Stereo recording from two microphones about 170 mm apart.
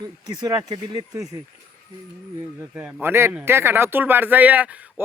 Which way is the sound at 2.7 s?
10° right (ahead or behind).